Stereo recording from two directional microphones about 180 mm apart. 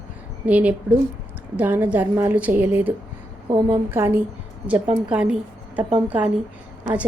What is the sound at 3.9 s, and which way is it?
A woman's voice, 10° right (ahead or behind).